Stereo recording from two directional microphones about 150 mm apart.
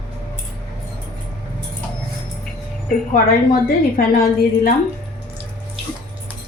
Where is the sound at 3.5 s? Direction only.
70° left (ahead or behind).